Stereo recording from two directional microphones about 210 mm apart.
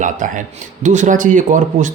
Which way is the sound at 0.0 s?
40° right (ahead or behind).